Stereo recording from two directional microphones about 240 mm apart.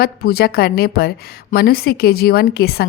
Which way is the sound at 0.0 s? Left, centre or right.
Left.